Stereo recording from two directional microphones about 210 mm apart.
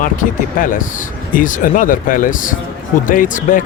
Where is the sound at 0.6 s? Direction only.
40° left (ahead or behind).